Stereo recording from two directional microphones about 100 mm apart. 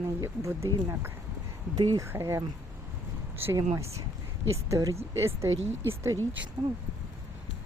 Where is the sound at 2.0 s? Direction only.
30° right (ahead or behind).